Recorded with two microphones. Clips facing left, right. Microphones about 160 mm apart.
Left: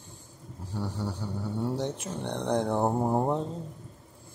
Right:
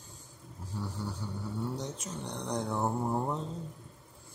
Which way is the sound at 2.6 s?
65° left (ahead or behind).